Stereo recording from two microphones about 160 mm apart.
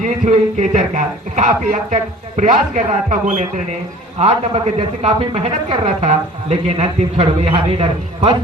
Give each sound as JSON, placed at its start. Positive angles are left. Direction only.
{"t": 0.0, "sound": "a man's voice", "side_deg": -50}
{"t": 4.2, "sound": "speech", "side_deg": -35}